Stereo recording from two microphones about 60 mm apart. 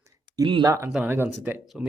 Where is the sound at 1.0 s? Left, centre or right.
Right.